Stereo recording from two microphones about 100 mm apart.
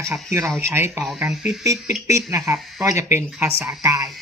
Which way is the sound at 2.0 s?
30° right (ahead or behind).